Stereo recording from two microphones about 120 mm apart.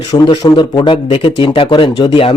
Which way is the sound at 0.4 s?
40° left (ahead or behind).